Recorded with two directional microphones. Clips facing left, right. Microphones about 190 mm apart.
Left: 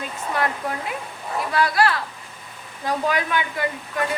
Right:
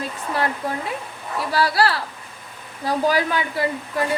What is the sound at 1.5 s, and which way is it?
A woman's voice, 30° right (ahead or behind).